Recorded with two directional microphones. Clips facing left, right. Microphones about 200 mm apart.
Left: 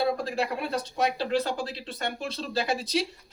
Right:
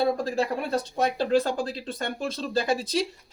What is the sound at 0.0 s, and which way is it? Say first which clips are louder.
A woman's voice: right 3 dB; 45° right (ahead or behind).